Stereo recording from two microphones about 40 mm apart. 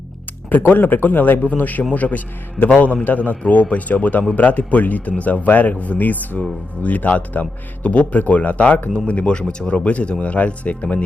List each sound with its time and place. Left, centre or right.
0.7 s a man's voice: left